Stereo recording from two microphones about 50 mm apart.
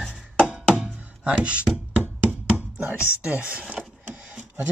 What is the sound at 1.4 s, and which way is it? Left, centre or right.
Speech, right.